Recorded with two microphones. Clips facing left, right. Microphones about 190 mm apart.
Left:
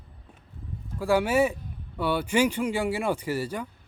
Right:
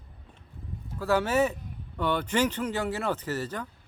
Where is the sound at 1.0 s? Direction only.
10° left (ahead or behind).